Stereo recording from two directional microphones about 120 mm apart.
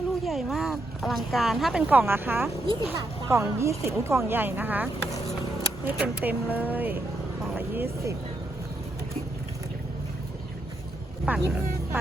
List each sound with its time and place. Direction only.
0.3 s speech: centre (ahead or behind)
1.9 s speech: 15° right (ahead or behind)
7.5 s vehicle: 15° right (ahead or behind)
11.3 s speech: 15° right (ahead or behind)